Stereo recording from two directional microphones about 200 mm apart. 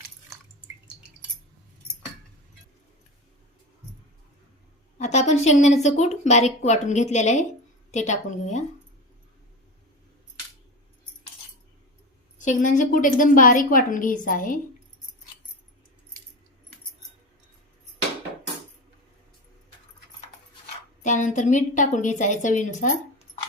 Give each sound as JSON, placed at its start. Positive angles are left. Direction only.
{"t": 4.9, "sound": "a woman's voice", "side_deg": 35}
{"t": 12.4, "sound": "a woman's voice", "side_deg": 40}
{"t": 21.0, "sound": "a woman's voice", "side_deg": 40}